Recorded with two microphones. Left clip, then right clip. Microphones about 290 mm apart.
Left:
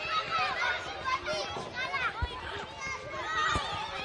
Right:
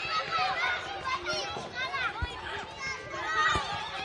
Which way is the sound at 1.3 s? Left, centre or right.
Centre.